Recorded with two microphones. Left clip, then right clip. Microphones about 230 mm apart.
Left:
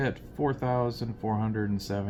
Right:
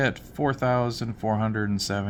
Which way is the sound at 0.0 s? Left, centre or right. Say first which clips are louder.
Right 4 dB; right.